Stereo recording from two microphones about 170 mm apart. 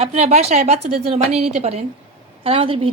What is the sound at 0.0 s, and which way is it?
A woman's voice, 40° right (ahead or behind).